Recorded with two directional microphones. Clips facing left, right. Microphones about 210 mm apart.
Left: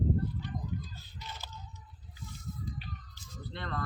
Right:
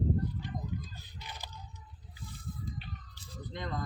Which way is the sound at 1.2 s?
15° right (ahead or behind).